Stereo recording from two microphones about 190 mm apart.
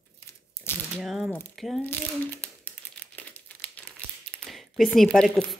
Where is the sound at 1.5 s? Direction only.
Centre (ahead or behind).